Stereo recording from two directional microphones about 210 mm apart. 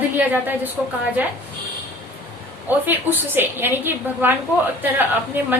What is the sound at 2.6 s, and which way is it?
A woman's voice, 10° right (ahead or behind).